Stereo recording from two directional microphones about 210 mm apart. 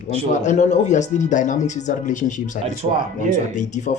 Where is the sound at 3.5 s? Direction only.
35° left (ahead or behind).